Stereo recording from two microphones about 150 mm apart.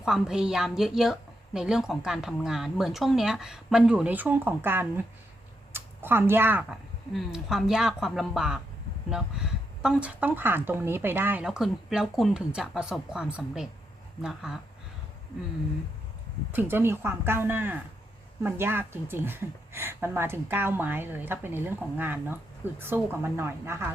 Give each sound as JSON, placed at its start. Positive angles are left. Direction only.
{"t": 0.0, "sound": "speech", "side_deg": -5}
{"t": 11.4, "sound": "speech", "side_deg": 0}
{"t": 16.5, "sound": "speech", "side_deg": -15}